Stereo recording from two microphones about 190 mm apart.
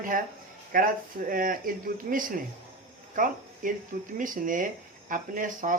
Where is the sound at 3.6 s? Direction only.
45° right (ahead or behind).